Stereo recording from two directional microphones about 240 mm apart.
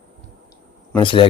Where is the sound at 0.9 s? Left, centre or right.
Left.